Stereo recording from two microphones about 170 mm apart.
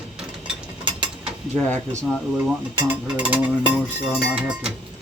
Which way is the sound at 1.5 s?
10° left (ahead or behind).